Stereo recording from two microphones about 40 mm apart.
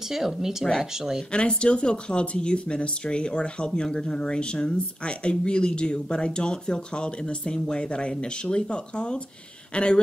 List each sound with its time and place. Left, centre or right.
0.1 s speech: centre
1.6 s speech: left